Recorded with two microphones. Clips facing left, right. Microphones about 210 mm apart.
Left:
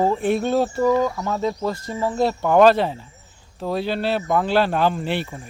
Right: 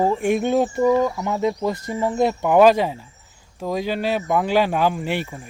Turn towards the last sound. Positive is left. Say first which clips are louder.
# even
turn(degrees=0)  # may be behind; listen again after turning